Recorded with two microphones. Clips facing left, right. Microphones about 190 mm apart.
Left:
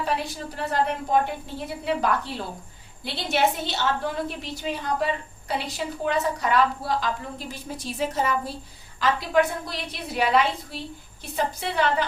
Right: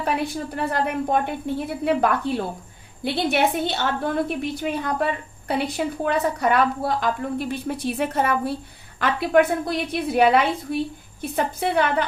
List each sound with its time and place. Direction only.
0.5 s a woman's voice: 55° right (ahead or behind)